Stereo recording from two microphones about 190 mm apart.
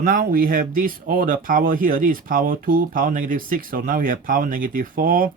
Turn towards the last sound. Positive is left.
turn(degrees=-50)  # may be behind; listen again after turning